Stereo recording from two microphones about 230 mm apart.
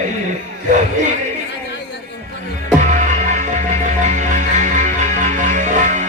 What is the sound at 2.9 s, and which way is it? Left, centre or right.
Music, right.